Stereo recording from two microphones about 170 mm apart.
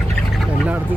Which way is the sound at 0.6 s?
10° right (ahead or behind).